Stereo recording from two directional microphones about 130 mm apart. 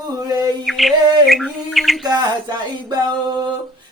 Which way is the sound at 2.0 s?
30° right (ahead or behind).